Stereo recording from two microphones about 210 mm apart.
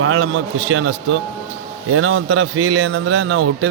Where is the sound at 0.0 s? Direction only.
85° right.